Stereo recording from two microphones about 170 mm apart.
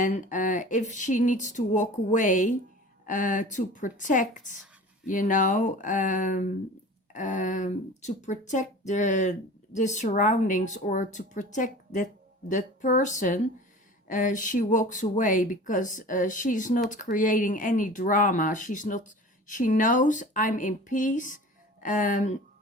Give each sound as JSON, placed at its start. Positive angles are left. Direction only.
{"t": 0.0, "sound": "speech", "side_deg": 50}